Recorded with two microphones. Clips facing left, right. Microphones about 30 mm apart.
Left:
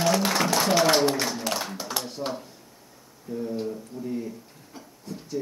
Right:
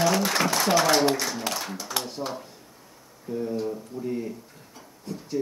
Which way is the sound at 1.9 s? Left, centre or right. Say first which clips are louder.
Right 4 dB; centre.